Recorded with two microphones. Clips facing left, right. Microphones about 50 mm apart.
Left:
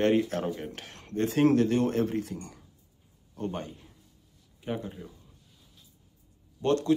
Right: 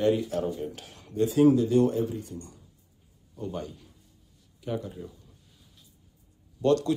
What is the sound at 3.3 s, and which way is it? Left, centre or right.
Speech, left.